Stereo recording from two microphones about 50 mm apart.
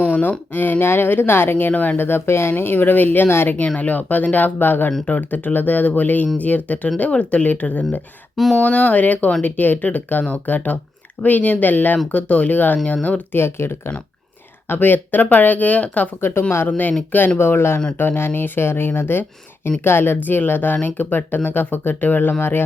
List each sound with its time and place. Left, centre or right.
0.0 s speech: left
1.7 s speech: left
2.0 s speech: left
13.3 s speech: left
14.7 s speech: left
17.3 s speech: left